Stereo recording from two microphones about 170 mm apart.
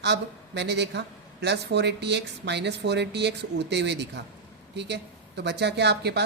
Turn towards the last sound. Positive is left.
turn(degrees=-80)